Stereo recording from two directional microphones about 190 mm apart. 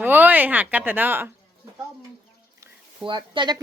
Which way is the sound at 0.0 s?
10° right (ahead or behind).